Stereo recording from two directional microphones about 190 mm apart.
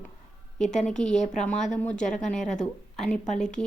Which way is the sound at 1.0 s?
40° left (ahead or behind).